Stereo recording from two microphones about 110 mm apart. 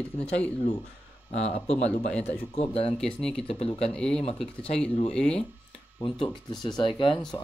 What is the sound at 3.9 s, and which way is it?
Speech, 5° left (ahead or behind).